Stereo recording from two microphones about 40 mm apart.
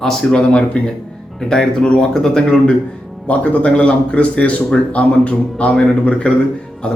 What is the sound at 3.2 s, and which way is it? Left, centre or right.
A man's voice, left.